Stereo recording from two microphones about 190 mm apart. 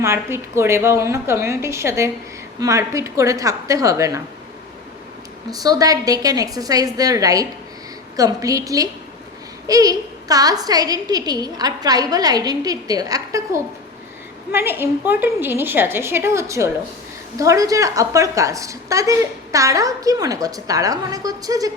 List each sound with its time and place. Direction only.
0.0 s a woman's voice: 15° right (ahead or behind)
5.5 s a woman's voice: 20° right (ahead or behind)